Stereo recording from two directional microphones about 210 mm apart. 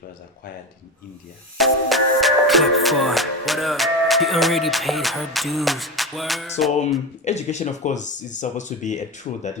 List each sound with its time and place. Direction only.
1.5 s music: centre (ahead or behind)
7.3 s speech: 35° left (ahead or behind)